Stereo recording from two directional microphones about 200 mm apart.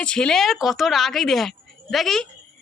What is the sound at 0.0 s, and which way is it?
A woman's voice, 5° left (ahead or behind).